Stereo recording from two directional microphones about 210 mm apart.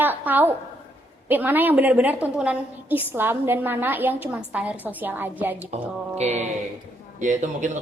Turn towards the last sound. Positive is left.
turn(degrees=-35)  # may be behind; listen again after turning